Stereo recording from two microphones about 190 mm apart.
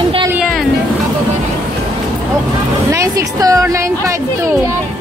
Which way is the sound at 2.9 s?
15° right (ahead or behind).